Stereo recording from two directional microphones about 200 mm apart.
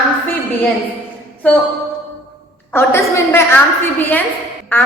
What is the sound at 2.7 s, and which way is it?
Speech, 15° left (ahead or behind).